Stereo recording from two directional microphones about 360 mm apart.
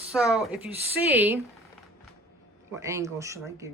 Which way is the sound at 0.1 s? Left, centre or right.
Centre.